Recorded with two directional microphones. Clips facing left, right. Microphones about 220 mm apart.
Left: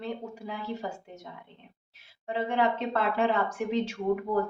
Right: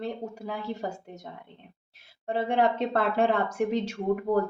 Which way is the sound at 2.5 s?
45° right (ahead or behind).